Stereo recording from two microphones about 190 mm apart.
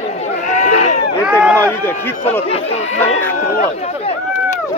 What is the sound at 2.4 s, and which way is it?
Speech, 30° left (ahead or behind).